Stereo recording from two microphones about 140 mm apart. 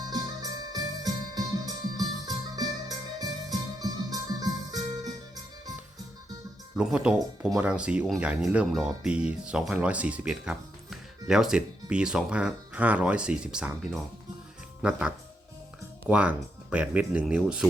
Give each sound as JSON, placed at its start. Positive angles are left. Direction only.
{"t": 0.0, "sound": "music", "side_deg": -25}
{"t": 6.7, "sound": "speech", "side_deg": -5}